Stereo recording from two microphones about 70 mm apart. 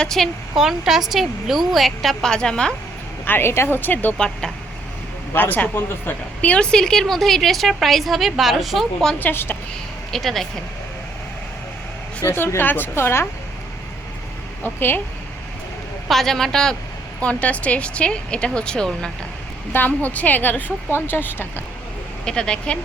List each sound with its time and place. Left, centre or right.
0.0 s speech: centre
0.5 s a woman's voice: centre
3.2 s speech: left
4.2 s speech: centre
5.3 s a woman's voice: left; by 9.1 s centre
9.1 s speech: left
10.1 s a woman's voice: centre
12.2 s speech: left
14.6 s speech: left
16.0 s speech: centre
17.2 s speech: centre
19.7 s speech: left
22.2 s speech: centre